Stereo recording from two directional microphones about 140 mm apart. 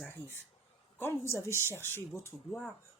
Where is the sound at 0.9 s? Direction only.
15° left (ahead or behind).